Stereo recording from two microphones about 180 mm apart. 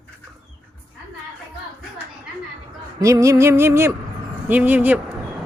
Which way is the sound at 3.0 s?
15° right (ahead or behind).